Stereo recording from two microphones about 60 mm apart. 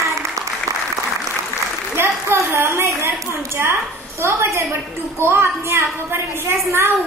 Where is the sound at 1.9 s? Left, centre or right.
Right.